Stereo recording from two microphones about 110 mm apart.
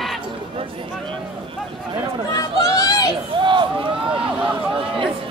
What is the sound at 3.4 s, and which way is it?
Run, 45° right (ahead or behind).